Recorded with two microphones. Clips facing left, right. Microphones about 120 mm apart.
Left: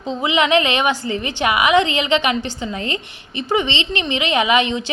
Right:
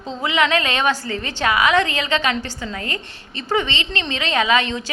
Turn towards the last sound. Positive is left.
turn(degrees=20)  # may be behind; listen again after turning